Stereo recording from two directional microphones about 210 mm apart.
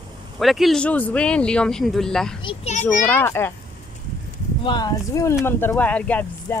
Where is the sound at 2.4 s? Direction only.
30° left (ahead or behind).